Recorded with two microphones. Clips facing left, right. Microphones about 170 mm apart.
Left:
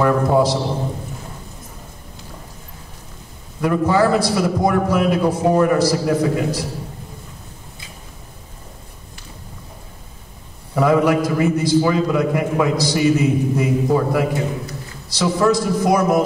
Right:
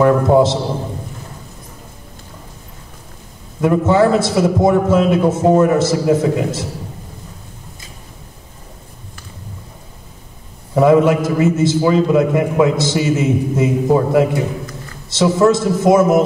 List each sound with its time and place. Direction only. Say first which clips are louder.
0.0 s a man's voice: right 4 dB; 25° right (ahead or behind)
3.6 s a man's voice: right 3 dB; 25° right (ahead or behind)
10.7 s a man's voice: right 4 dB; 25° right (ahead or behind)